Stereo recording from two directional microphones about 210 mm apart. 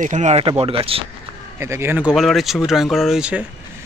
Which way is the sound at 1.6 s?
10° right (ahead or behind).